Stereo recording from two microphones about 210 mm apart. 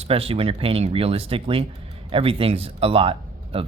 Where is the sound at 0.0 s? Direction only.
25° right (ahead or behind).